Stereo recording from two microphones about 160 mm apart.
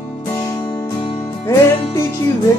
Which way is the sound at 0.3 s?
25° left (ahead or behind).